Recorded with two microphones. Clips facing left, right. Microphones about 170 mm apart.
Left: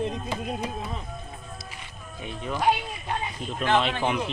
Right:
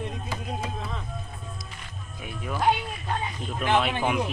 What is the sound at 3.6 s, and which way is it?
Speech, 10° right (ahead or behind).